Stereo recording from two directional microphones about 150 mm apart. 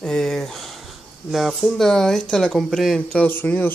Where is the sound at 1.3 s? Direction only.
Centre (ahead or behind).